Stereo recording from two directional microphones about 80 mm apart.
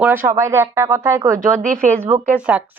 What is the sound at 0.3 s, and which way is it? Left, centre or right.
Speech, right.